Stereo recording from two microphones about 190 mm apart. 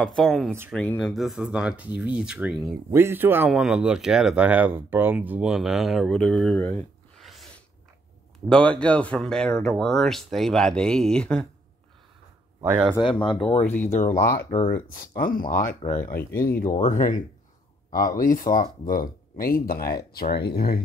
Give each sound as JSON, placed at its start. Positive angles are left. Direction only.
{"t": 0.0, "sound": "speech", "side_deg": 0}
{"t": 7.2, "sound": "sneeze", "side_deg": 0}
{"t": 8.5, "sound": "speech", "side_deg": 5}
{"t": 12.5, "sound": "speech", "side_deg": -10}
{"t": 12.9, "sound": "speech", "side_deg": 25}
{"t": 13.6, "sound": "speech", "side_deg": 10}
{"t": 13.8, "sound": "speech", "side_deg": 45}
{"t": 18.2, "sound": "speech", "side_deg": 45}